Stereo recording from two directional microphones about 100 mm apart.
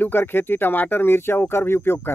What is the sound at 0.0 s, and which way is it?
Speech, 20° left (ahead or behind).